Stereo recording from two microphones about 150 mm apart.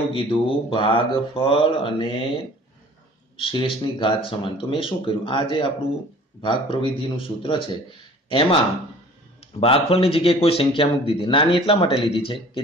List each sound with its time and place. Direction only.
0.1 s speech: 35° left (ahead or behind)
3.3 s speech: 35° left (ahead or behind)